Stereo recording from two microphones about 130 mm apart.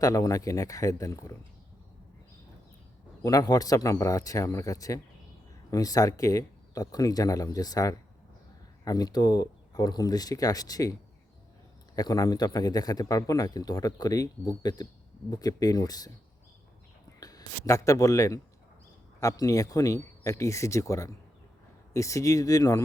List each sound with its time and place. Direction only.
0.0 s a man's voice: 25° left (ahead or behind)
3.2 s a man's voice: 30° left (ahead or behind)
11.9 s a man's voice: 30° left (ahead or behind)
17.2 s a man's voice: 30° left (ahead or behind)